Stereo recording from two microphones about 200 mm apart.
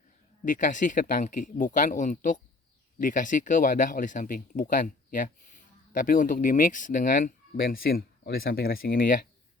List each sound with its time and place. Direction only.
0.4 s speech: 40° left (ahead or behind)